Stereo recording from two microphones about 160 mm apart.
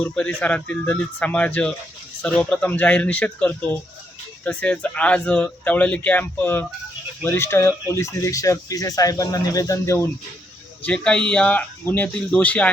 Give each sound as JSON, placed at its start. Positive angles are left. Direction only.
{"t": 0.0, "sound": "speech", "side_deg": 10}
{"t": 10.8, "sound": "speech", "side_deg": 5}